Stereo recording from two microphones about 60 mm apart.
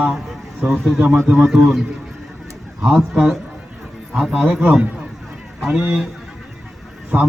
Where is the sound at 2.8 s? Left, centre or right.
Centre.